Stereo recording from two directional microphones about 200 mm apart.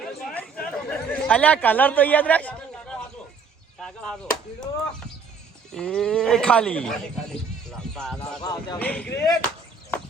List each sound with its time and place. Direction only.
0.0 s chatter: 5° left (ahead or behind)
3.8 s chop: 5° left (ahead or behind)
5.7 s speech: 5° left (ahead or behind)
8.2 s speech: 20° left (ahead or behind)
8.8 s speech: 5° left (ahead or behind)